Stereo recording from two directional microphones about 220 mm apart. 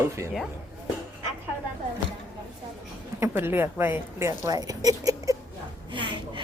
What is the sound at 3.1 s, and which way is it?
A woman's voice, 10° right (ahead or behind).